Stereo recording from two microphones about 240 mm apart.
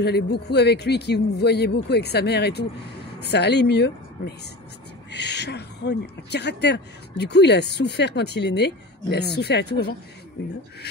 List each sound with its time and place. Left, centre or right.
0.0 s speech: left